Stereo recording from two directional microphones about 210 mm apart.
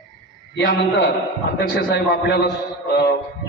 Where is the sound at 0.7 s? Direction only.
60° left (ahead or behind).